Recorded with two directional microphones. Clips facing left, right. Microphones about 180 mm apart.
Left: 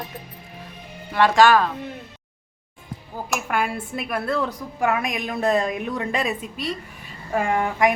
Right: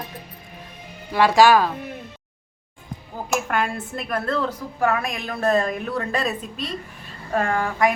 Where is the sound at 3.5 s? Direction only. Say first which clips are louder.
Even; 10° left (ahead or behind).